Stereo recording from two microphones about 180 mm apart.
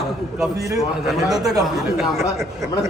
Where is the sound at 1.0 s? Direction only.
Centre (ahead or behind).